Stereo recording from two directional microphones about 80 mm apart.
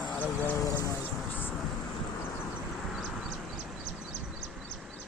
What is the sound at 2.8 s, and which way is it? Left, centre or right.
Vehicle, centre.